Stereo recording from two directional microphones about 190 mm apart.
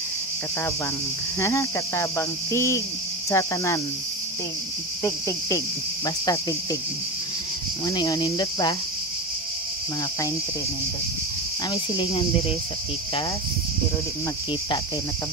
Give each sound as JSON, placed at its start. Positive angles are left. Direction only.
{"t": 1.4, "sound": "cricket", "side_deg": 15}
{"t": 6.0, "sound": "cricket", "side_deg": 20}
{"t": 7.8, "sound": "speech", "side_deg": 20}
{"t": 11.7, "sound": "speech", "side_deg": 25}